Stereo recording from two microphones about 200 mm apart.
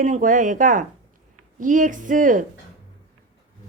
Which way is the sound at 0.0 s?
40° right (ahead or behind).